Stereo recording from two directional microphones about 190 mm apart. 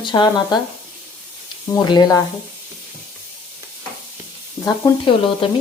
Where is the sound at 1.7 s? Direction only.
20° left (ahead or behind).